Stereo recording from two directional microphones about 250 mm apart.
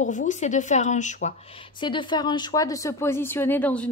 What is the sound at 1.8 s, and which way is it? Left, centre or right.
A woman's voice, centre.